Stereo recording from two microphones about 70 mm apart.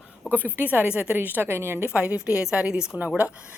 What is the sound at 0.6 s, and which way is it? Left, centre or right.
A woman's voice, right.